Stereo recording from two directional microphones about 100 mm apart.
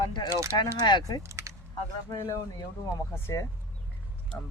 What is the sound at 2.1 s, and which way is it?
Speech, 20° left (ahead or behind).